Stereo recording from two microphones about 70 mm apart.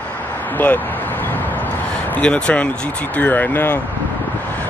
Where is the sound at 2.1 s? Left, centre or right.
Centre.